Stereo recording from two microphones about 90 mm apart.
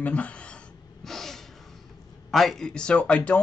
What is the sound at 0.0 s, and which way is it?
Speech, 15° left (ahead or behind).